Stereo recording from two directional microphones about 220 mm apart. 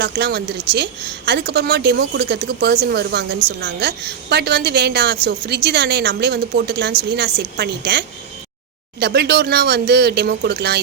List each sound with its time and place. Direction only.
0.0 s a woman's voice: 50° right (ahead or behind)